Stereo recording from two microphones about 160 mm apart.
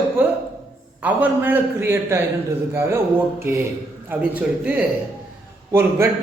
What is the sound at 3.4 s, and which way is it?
A man's voice, 15° right (ahead or behind).